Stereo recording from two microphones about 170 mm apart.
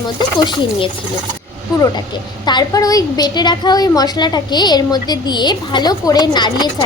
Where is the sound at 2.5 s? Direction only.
25° left (ahead or behind).